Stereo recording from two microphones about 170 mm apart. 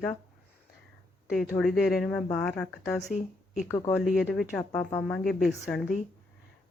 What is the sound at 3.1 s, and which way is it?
Speech, 45° left (ahead or behind).